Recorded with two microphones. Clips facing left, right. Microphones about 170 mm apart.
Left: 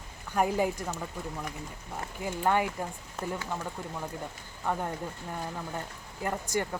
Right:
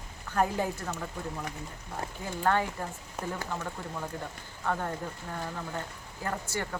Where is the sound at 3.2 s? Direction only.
10° right (ahead or behind).